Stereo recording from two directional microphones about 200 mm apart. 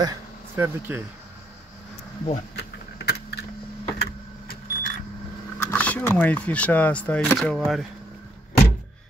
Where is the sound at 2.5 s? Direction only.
55° left (ahead or behind).